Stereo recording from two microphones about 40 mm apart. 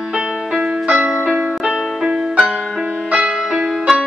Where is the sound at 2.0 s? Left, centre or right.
Centre.